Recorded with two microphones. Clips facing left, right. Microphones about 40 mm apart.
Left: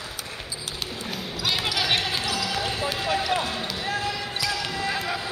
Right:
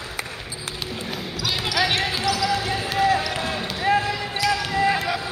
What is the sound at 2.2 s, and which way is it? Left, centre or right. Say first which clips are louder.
Basketball bounce: right 5 dB; left.